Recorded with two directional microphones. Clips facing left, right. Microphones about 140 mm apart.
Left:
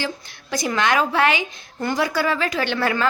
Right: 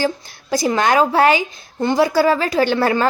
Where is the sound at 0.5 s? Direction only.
35° right (ahead or behind).